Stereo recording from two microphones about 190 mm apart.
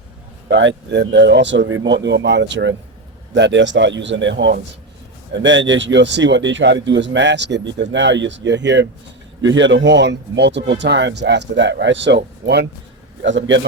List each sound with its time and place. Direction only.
0.4 s speech: 75° right (ahead or behind)
13.2 s speech: 75° right (ahead or behind)